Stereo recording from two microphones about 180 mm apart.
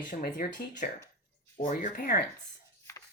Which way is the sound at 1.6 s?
45° left (ahead or behind).